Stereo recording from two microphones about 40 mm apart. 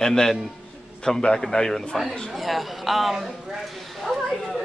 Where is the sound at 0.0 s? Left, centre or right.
Centre.